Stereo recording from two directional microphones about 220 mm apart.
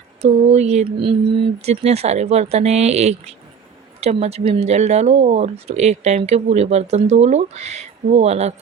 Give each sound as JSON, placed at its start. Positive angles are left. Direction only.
{"t": 0.2, "sound": "speech", "side_deg": -30}